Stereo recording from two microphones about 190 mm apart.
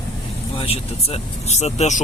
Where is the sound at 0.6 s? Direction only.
30° left (ahead or behind).